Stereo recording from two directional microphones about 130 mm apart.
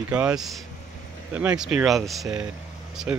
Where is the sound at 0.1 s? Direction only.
5° right (ahead or behind).